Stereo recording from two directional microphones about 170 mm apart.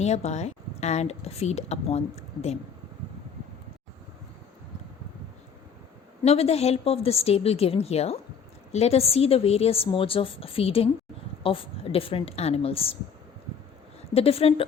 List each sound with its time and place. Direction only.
0.0 s speech: 40° left (ahead or behind)
6.2 s speech: 35° left (ahead or behind)
14.1 s speech: 35° left (ahead or behind)